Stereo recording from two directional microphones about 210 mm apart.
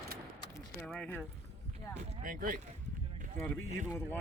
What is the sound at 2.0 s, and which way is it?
Speech, 40° right (ahead or behind).